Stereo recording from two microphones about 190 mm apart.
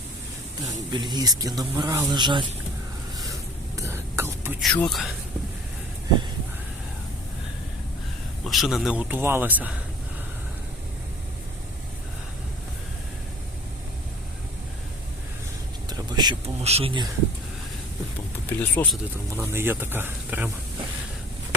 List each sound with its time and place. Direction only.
0.6 s speech: 20° right (ahead or behind)
3.8 s whispering: 15° right (ahead or behind)
4.6 s speech: 5° left (ahead or behind)
8.4 s speech: centre (ahead or behind)
15.9 s speech: 20° right (ahead or behind)
18.5 s speech: 10° left (ahead or behind)
19.3 s speech: 15° right (ahead or behind)